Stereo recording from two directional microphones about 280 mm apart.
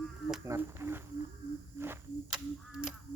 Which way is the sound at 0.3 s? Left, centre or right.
Centre.